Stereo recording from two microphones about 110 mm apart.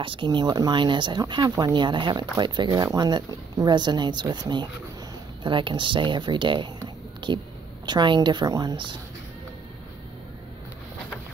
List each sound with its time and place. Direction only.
0.0 s speech: 50° right (ahead or behind)